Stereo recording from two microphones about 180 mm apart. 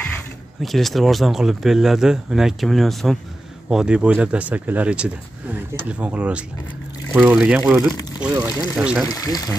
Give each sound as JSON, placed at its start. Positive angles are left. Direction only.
{"t": 0.6, "sound": "speech", "side_deg": 0}
{"t": 9.1, "sound": "speech", "side_deg": 20}